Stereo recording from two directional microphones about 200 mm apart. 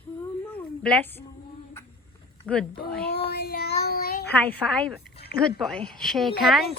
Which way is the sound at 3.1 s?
50° left (ahead or behind).